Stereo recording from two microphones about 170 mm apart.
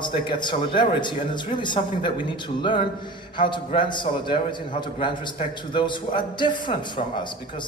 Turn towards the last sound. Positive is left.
turn(degrees=25)  # may be behind; listen again after turning